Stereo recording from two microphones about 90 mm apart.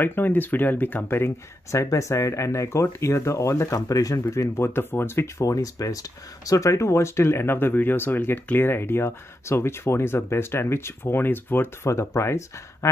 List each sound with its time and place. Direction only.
0.0 s speech: 20° left (ahead or behind)